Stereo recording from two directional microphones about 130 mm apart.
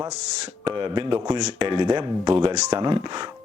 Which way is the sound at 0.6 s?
35° right (ahead or behind).